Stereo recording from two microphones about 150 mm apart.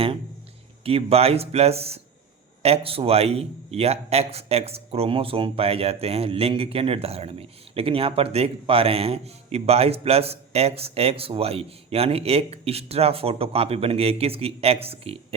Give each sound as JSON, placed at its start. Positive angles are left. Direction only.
{"t": 0.9, "sound": "a man's voice", "side_deg": -40}